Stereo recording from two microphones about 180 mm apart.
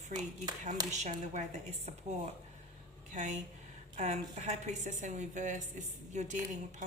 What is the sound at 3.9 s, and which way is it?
A woman's voice, 40° right (ahead or behind).